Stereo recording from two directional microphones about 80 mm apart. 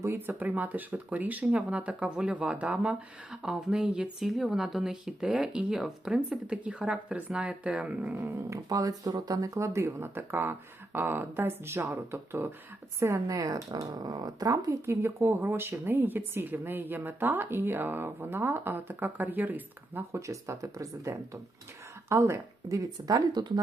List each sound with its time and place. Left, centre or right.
0.0 s speech: right
8.4 s speech: right
9.6 s speech: right
20.1 s speech: right